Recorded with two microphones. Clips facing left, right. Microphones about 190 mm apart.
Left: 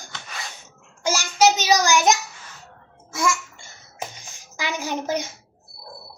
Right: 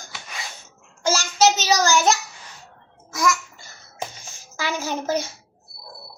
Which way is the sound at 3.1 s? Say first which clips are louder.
Right 1 dB; 25° left (ahead or behind).